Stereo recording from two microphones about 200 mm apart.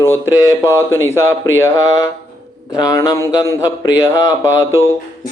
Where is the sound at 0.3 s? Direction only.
15° left (ahead or behind).